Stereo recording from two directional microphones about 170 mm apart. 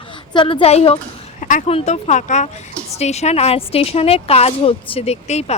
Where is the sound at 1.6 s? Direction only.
40° left (ahead or behind).